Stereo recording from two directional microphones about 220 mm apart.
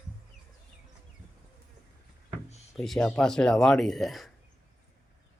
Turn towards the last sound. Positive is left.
turn(degrees=0)  # may be behind; listen again after turning